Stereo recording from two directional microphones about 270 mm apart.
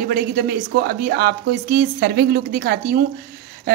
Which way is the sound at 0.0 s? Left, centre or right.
Right.